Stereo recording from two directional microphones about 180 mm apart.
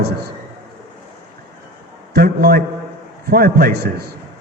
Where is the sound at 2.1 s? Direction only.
60° right (ahead or behind).